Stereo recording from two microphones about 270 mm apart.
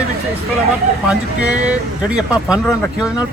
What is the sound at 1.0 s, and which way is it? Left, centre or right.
Speech, centre.